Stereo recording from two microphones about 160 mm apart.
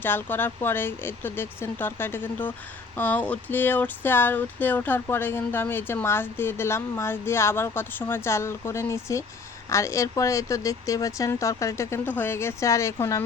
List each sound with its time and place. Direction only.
0.0 s speech: 15° left (ahead or behind)